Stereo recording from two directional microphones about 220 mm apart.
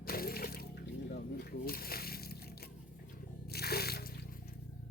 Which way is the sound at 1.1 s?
45° left (ahead or behind).